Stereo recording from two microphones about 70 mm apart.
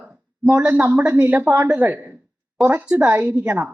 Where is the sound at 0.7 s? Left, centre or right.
Right.